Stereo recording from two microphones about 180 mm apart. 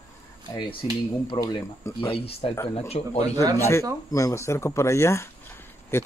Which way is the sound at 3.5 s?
15° left (ahead or behind).